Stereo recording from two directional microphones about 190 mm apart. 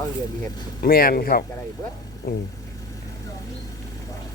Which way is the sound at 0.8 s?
50° left (ahead or behind).